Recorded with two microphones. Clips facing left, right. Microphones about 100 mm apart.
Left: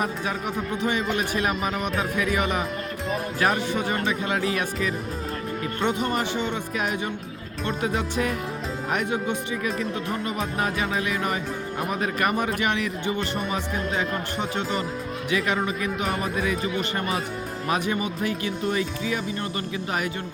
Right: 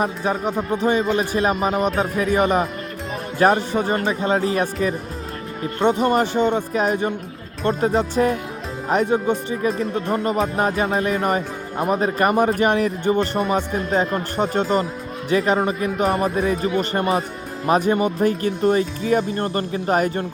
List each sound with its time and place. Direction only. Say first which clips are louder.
0.0 s speech: right 6 dB; 35° right (ahead or behind)